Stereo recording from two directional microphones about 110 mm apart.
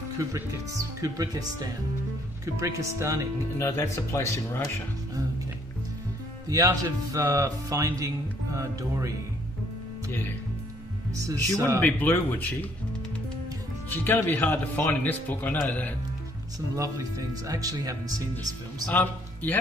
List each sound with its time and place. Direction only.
0.3 s speech: 30° right (ahead or behind)
3.5 s speech: 25° left (ahead or behind)
6.5 s speech: 35° right (ahead or behind)
11.1 s speech: 30° right (ahead or behind)
11.8 s speech: 15° left (ahead or behind)
13.8 s speech: 20° left (ahead or behind)
16.5 s speech: 30° right (ahead or behind)
18.9 s a man's voice: 15° left (ahead or behind)